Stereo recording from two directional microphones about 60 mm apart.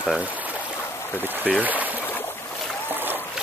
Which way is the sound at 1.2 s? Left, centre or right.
Right.